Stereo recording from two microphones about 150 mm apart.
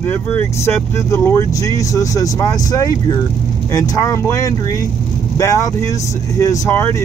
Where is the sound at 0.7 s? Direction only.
15° left (ahead or behind).